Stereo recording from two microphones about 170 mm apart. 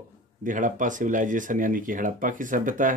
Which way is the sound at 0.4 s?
50° right (ahead or behind).